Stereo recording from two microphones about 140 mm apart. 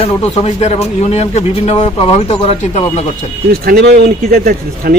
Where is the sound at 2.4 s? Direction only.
50° left (ahead or behind).